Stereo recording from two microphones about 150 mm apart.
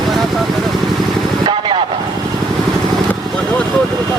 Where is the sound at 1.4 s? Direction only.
35° right (ahead or behind).